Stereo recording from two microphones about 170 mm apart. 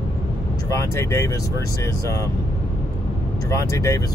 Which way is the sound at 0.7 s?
15° left (ahead or behind).